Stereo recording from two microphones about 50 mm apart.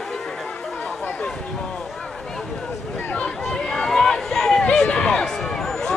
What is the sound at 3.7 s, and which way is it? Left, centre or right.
Music, centre.